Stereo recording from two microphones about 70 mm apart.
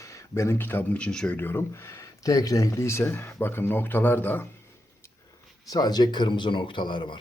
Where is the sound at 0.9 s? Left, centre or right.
Centre.